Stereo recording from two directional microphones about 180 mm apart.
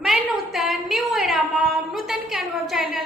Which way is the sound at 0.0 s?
Centre (ahead or behind).